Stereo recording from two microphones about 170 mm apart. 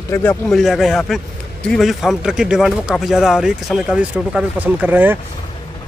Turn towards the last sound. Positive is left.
turn(degrees=-10)  # may be behind; listen again after turning